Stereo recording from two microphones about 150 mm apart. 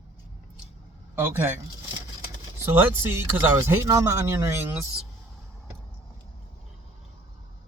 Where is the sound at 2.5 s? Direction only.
15° right (ahead or behind).